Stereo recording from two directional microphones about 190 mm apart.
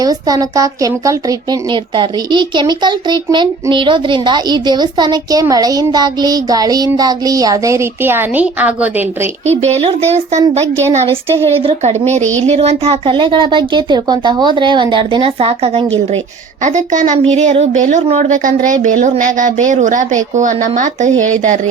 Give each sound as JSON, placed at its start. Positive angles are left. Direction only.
{"t": 0.0, "sound": "speech", "side_deg": -20}
{"t": 9.5, "sound": "a woman's voice", "side_deg": -35}